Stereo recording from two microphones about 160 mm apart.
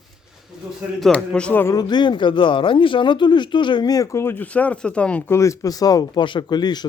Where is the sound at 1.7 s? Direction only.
30° left (ahead or behind).